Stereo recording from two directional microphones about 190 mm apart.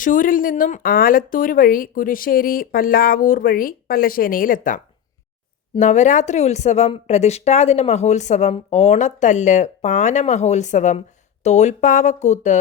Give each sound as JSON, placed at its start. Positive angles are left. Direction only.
{"t": 0.0, "sound": "speech", "side_deg": 45}